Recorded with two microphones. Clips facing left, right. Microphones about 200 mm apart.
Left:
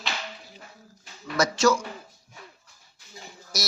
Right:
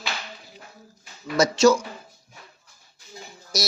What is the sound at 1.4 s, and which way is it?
Speech, 20° right (ahead or behind).